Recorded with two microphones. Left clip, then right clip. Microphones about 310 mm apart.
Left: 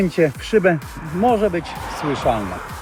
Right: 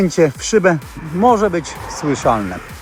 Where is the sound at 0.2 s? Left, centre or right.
Centre.